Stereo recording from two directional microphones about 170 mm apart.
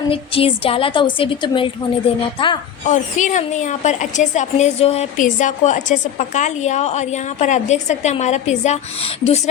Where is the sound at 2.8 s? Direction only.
45° left (ahead or behind).